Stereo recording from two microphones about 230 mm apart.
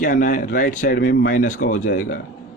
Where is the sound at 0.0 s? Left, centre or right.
Left.